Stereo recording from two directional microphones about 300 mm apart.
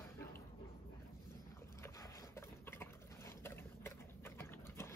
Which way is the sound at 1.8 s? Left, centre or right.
Centre.